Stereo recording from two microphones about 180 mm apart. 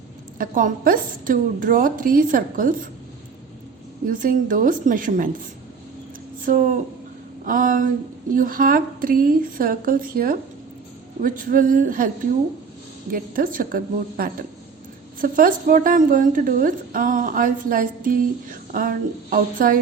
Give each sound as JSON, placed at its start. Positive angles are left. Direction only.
{"t": 0.3, "sound": "a woman's voice", "side_deg": -50}
{"t": 4.0, "sound": "a woman's voice", "side_deg": -50}
{"t": 6.4, "sound": "a woman's voice", "side_deg": -45}